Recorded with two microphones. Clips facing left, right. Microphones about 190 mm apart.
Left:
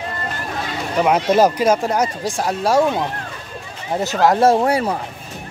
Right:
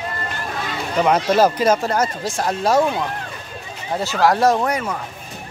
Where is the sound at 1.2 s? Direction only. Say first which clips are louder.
Left 1 dB; 15° left (ahead or behind).